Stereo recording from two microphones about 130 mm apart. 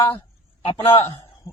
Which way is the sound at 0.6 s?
45° left (ahead or behind).